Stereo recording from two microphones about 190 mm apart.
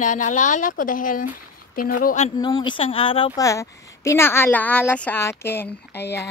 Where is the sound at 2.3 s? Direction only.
20° left (ahead or behind).